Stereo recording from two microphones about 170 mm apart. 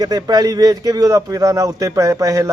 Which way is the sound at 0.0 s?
20° right (ahead or behind).